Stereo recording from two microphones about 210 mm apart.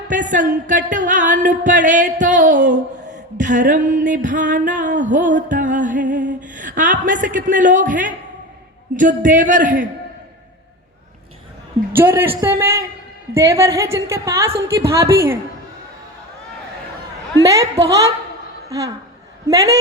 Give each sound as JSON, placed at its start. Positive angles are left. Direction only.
{"t": 0.1, "sound": "music", "side_deg": -35}
{"t": 2.6, "sound": "a sound", "side_deg": -35}
{"t": 3.7, "sound": "music", "side_deg": -35}
{"t": 11.9, "sound": "a woman's voice", "side_deg": -10}
{"t": 17.4, "sound": "a woman's voice", "side_deg": -15}
{"t": 19.5, "sound": "a woman's voice", "side_deg": -15}